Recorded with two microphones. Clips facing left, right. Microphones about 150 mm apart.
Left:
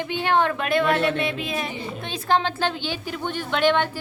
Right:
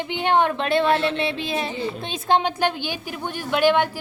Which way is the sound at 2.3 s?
15° right (ahead or behind).